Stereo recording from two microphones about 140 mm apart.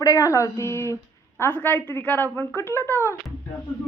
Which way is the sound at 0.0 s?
25° left (ahead or behind).